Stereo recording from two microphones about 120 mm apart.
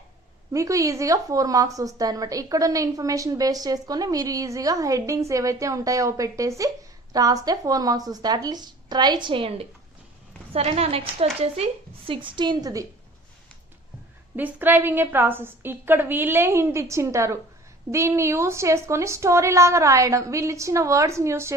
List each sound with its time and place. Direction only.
0.5 s a woman's voice: 25° right (ahead or behind)
14.3 s a woman's voice: 15° right (ahead or behind)